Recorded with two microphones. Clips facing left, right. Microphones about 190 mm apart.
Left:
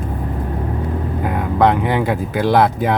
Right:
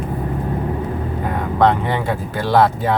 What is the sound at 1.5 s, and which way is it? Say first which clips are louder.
Speech: left 1 dB; 10° left (ahead or behind).